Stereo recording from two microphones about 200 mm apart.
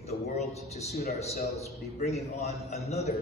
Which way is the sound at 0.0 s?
35° left (ahead or behind).